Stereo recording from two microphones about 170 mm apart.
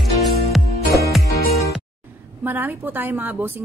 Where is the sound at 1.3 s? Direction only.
65° left (ahead or behind).